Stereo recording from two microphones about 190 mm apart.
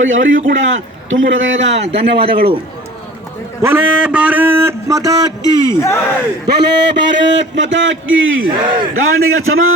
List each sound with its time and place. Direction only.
0.0 s a man's voice: 90° right; by 2.5 s 60° right (ahead or behind)
3.6 s speech: 10° right (ahead or behind)
5.7 s speech: 15° left (ahead or behind)
6.5 s a man's voice: 60° right (ahead or behind); by 8.4 s 90° right
8.6 s a man's voice: 25° right (ahead or behind)
9.0 s a man's voice: 90° right